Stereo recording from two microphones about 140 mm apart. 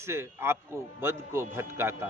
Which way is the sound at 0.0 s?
20° right (ahead or behind).